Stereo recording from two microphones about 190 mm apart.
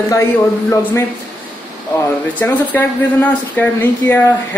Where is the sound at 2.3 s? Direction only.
10° left (ahead or behind).